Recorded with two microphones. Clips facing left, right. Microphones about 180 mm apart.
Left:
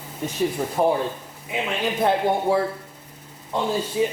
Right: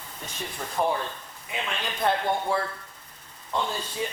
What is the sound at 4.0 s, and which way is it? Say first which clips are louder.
Speech: left 10 dB; 10° left (ahead or behind).